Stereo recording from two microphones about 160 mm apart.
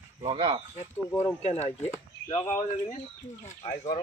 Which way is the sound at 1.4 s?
40° left (ahead or behind).